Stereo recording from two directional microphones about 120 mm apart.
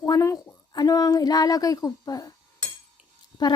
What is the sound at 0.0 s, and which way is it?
A woman's voice, 25° left (ahead or behind).